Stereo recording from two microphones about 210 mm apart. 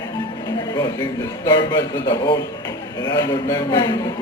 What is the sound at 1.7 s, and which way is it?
A man's voice, 20° left (ahead or behind).